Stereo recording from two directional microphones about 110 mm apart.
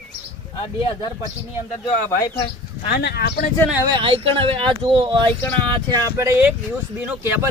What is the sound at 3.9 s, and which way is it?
Speech, 55° right (ahead or behind).